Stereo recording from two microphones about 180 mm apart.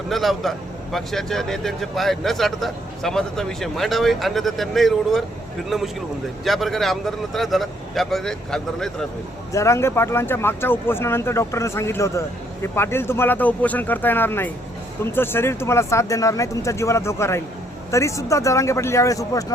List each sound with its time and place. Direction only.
0.1 s speech: centre (ahead or behind)
9.5 s speech: 15° left (ahead or behind)